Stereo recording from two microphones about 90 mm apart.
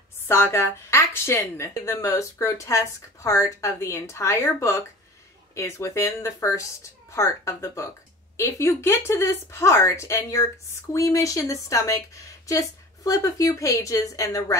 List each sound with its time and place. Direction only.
0.3 s a woman's voice: 30° left (ahead or behind)